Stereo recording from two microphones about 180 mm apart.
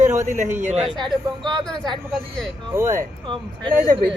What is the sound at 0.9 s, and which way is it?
Speech, 25° right (ahead or behind).